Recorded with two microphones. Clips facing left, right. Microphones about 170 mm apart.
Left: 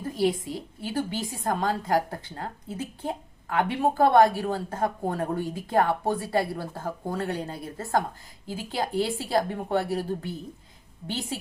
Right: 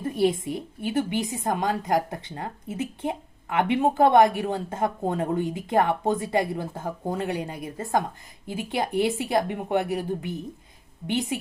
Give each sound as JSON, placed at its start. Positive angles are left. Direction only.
{"t": 0.0, "sound": "a woman's voice", "side_deg": -25}